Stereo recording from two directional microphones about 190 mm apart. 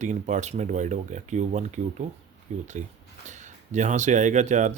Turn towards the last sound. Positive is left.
turn(degrees=-40)  # may be behind; listen again after turning